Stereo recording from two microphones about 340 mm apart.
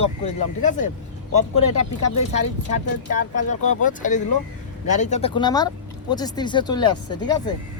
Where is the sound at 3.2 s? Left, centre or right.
Left.